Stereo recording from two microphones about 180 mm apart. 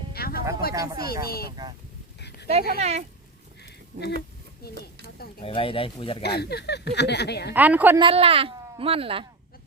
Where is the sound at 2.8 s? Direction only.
35° right (ahead or behind).